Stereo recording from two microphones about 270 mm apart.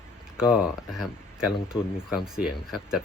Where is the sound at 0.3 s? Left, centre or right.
Centre.